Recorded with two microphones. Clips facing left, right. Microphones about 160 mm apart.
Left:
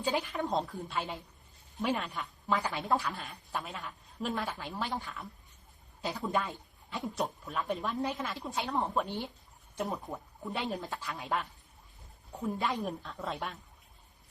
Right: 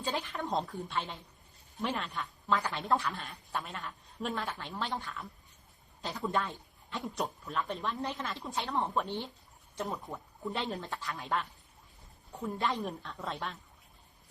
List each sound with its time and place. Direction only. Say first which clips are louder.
0.0 s a woman's voice: left 3 dB; 15° left (ahead or behind)
0.5 s a woman's voice: right 2 dB; centre (ahead or behind)
2.8 s a woman's voice: even; centre (ahead or behind)
6.0 s a woman's voice: left 1 dB; 10° left (ahead or behind)
7.0 s a woman's voice: left 2 dB; centre (ahead or behind)
9.0 s a woman's voice: even; 10° left (ahead or behind)
10.5 s a woman's voice: left 2 dB; centre (ahead or behind)
12.3 s a woman's voice: left 2 dB; 10° left (ahead or behind)
12.6 s a woman's voice: even; centre (ahead or behind)